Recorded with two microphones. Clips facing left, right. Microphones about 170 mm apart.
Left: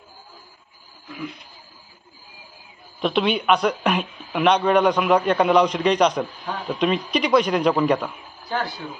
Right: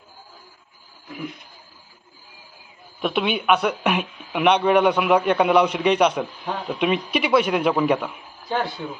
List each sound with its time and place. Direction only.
3.0 s speech: 5° right (ahead or behind)
8.4 s speech: 20° right (ahead or behind)